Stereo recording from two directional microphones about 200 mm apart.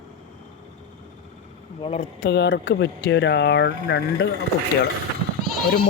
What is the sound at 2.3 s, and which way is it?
Speech, 60° left (ahead or behind).